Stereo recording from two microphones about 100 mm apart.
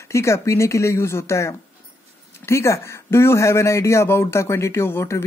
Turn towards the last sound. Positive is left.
turn(degrees=25)  # may be behind; listen again after turning